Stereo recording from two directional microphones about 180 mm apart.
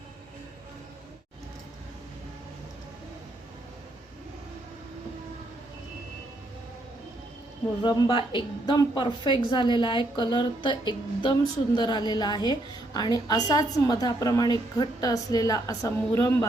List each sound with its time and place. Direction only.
7.8 s a woman's voice: 25° left (ahead or behind)